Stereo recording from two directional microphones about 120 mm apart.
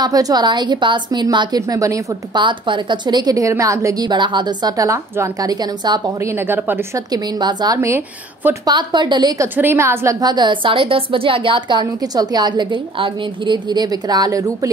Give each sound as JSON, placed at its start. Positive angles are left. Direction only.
{"t": 0.0, "sound": "a woman's voice", "side_deg": -30}
{"t": 2.3, "sound": "a woman's voice", "side_deg": -40}
{"t": 6.3, "sound": "a woman's voice", "side_deg": -20}
{"t": 7.1, "sound": "a woman's voice", "side_deg": -35}
{"t": 8.6, "sound": "a woman's voice", "side_deg": -40}
{"t": 9.4, "sound": "a woman's voice", "side_deg": -20}
{"t": 10.2, "sound": "a woman's voice", "side_deg": -40}